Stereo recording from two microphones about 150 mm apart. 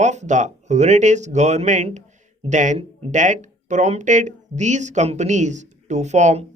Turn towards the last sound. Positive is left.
turn(degrees=-50)  # may be behind; listen again after turning